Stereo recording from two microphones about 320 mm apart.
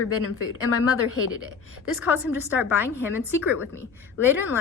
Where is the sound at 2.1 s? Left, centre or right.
Centre.